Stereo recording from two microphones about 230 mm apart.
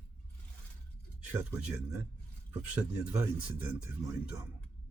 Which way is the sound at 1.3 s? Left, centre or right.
Centre.